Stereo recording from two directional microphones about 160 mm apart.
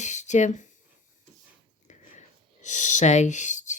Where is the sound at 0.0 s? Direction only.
50° left (ahead or behind).